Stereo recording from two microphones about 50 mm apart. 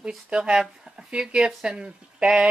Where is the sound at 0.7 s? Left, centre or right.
Centre.